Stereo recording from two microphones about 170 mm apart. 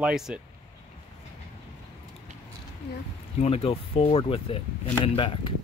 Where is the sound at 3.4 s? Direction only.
35° left (ahead or behind).